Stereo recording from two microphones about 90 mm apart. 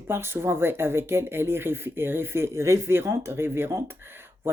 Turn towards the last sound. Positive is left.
turn(degrees=-25)  # may be behind; listen again after turning